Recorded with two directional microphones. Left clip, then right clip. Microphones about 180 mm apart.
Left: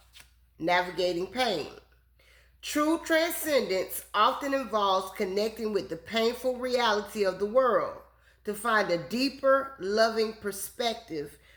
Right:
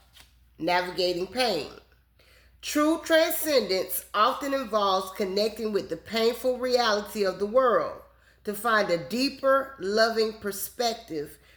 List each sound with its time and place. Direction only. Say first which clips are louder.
0.6 s speech: right 1 dB; 30° right (ahead or behind)